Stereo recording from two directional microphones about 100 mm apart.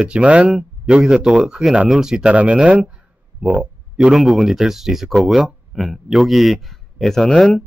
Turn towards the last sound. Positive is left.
turn(degrees=0)  # may be behind; listen again after turning